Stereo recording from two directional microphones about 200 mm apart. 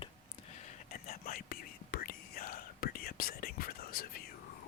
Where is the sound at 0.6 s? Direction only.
40° left (ahead or behind).